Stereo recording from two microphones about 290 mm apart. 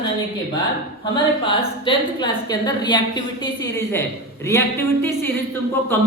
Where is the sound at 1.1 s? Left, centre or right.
Centre.